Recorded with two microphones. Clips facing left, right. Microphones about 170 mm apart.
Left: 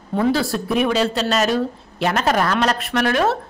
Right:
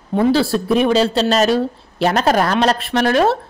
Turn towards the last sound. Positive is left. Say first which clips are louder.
# right 4 dB
turn(degrees=-30)  # may be behind; listen again after turning